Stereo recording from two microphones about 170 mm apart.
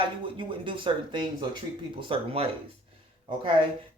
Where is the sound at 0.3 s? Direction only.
30° right (ahead or behind).